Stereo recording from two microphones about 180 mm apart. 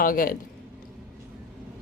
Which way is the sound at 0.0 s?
50° left (ahead or behind).